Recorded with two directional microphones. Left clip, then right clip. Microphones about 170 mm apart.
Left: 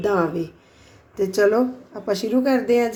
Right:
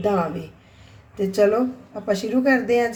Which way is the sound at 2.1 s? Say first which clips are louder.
Right 1 dB; 45° left (ahead or behind).